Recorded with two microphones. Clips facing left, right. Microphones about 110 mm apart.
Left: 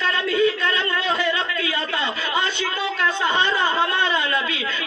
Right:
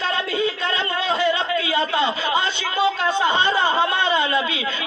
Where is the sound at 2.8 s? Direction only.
20° right (ahead or behind).